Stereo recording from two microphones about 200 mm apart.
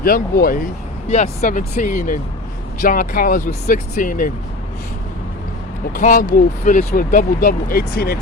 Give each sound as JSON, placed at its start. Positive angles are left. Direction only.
{"t": 0.0, "sound": "speech", "side_deg": 45}
{"t": 1.0, "sound": "speech", "side_deg": 35}
{"t": 5.9, "sound": "speech", "side_deg": 40}